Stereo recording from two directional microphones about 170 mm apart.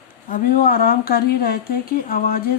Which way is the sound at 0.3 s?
55° left (ahead or behind).